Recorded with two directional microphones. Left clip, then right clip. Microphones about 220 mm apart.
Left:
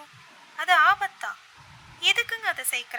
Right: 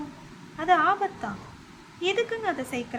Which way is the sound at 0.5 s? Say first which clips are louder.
Left 2 dB; 30° left (ahead or behind).